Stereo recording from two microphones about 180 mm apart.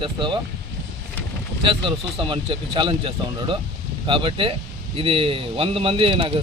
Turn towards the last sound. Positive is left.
turn(degrees=-30)  # may be behind; listen again after turning